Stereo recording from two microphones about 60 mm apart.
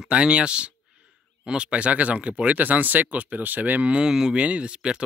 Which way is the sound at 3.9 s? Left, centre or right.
Centre.